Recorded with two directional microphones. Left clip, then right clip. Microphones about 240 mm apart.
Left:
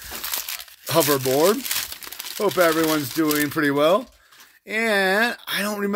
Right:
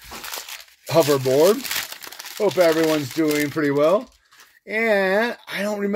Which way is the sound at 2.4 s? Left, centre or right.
Centre.